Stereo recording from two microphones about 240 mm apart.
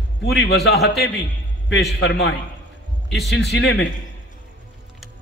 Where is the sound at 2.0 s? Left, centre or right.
Left.